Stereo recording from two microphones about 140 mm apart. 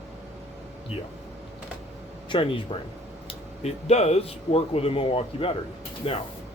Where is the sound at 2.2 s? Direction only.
35° left (ahead or behind).